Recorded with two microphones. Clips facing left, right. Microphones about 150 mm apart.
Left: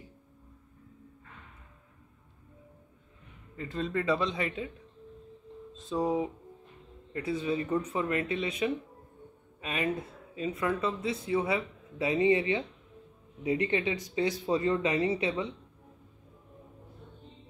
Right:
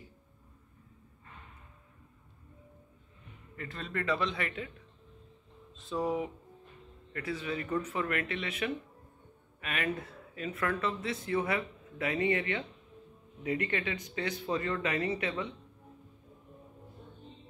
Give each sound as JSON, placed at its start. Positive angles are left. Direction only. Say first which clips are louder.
{"t": 3.5, "sound": "speech", "louder": "left 6 dB", "side_deg": 20}
{"t": 5.9, "sound": "speech", "louder": "left 3 dB", "side_deg": 20}